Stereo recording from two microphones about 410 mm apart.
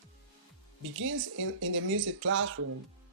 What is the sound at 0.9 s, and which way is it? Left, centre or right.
Speech, right.